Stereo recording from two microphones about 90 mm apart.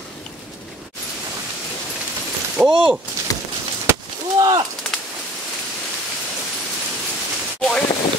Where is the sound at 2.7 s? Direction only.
70° right (ahead or behind).